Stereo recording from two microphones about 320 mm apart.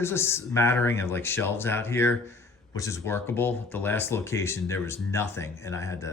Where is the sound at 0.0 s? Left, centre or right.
Centre.